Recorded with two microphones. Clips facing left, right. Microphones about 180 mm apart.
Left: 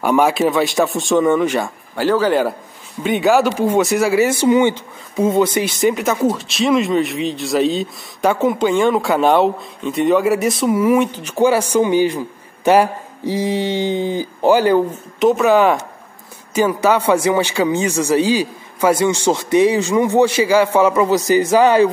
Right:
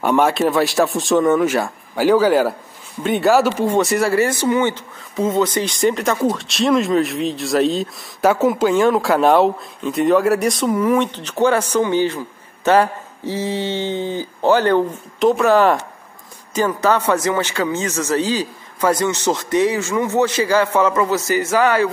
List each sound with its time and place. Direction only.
0.0 s speech: centre (ahead or behind); by 21.8 s 20° left (ahead or behind)